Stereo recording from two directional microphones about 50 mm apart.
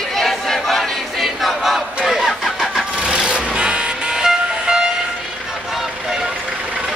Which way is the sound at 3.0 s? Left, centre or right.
Right.